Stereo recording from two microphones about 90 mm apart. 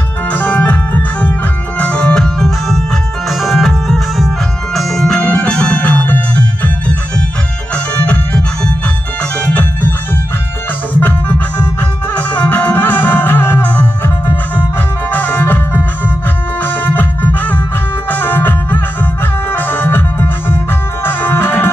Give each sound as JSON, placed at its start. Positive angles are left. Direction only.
{"t": 0.3, "sound": "music", "side_deg": 20}
{"t": 1.8, "sound": "organ", "side_deg": 15}
{"t": 3.3, "sound": "music", "side_deg": 0}
{"t": 7.7, "sound": "music", "side_deg": 15}
{"t": 11.0, "sound": "music", "side_deg": 20}